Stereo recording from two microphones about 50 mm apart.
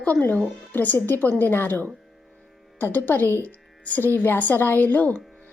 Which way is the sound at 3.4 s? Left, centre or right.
Left.